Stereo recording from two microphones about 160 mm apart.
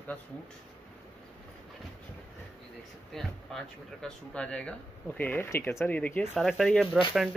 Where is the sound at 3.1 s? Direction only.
5° left (ahead or behind).